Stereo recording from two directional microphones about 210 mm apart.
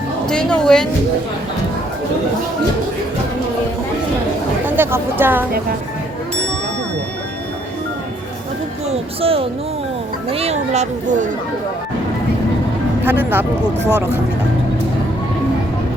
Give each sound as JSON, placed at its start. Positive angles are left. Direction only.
{"t": 0.3, "sound": "speech", "side_deg": 5}
{"t": 4.6, "sound": "speech", "side_deg": -10}
{"t": 8.9, "sound": "speech", "side_deg": -25}
{"t": 13.1, "sound": "speech", "side_deg": -10}